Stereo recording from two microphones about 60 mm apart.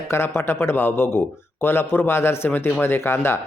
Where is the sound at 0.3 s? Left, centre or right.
Left.